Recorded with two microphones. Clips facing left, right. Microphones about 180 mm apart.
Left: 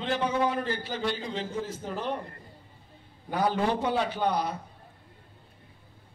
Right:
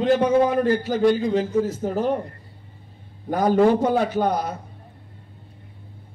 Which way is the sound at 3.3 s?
45° right (ahead or behind).